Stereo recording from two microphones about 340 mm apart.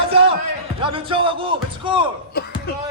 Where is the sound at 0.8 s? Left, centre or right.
Centre.